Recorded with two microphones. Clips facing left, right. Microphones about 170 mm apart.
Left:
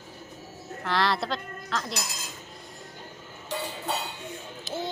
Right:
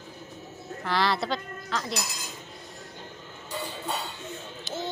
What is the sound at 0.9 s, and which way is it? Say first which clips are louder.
A woman's voice: even; centre (ahead or behind).